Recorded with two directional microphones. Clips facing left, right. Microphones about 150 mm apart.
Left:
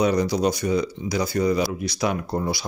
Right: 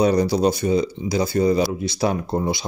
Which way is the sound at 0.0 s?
30° right (ahead or behind).